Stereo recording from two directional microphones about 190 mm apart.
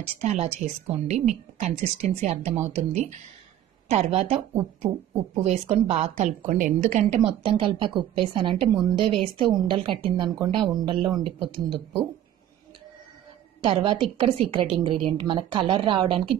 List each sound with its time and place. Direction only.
0.0 s a woman's voice: 35° right (ahead or behind)
13.6 s a woman's voice: 30° right (ahead or behind)